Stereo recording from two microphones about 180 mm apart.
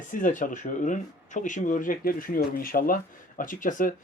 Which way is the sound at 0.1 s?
45° left (ahead or behind).